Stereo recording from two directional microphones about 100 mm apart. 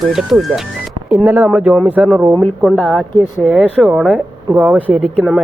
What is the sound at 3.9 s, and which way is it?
Speech, 10° right (ahead or behind).